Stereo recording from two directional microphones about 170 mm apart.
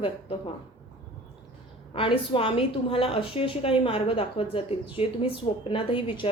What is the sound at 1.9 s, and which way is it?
A woman's voice, 30° left (ahead or behind).